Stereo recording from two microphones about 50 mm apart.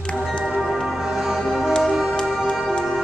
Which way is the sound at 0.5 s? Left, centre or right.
Centre.